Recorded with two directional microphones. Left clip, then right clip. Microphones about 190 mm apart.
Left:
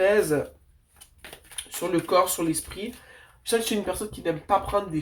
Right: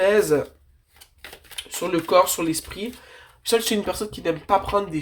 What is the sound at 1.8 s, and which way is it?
Speech, 35° right (ahead or behind).